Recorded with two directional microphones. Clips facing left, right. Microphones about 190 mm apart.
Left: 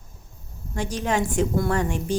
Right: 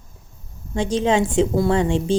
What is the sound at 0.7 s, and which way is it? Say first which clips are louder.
Speech: right 6 dB; 20° right (ahead or behind).